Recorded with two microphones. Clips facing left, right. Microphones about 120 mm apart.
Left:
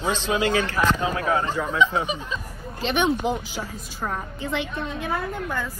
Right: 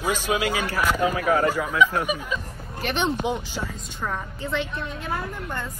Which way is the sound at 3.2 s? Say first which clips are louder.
Left 1 dB; centre (ahead or behind).